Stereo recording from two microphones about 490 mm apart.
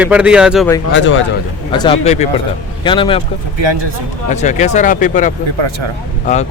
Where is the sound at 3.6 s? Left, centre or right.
Right.